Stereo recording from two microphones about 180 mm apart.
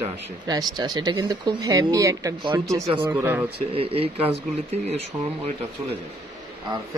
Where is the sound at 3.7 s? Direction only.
30° right (ahead or behind).